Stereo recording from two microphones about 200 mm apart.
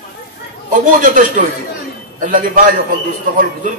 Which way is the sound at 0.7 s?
40° right (ahead or behind).